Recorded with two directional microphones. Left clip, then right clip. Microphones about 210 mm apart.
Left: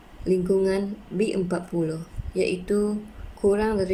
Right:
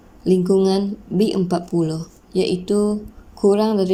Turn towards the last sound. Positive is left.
turn(degrees=-15)  # may be behind; listen again after turning